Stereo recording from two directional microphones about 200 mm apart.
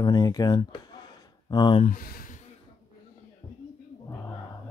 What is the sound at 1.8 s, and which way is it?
Speech, 45° left (ahead or behind).